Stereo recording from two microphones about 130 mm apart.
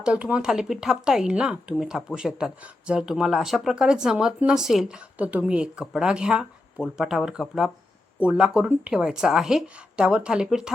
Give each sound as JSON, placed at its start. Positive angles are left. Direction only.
{"t": 0.0, "sound": "speech", "side_deg": -10}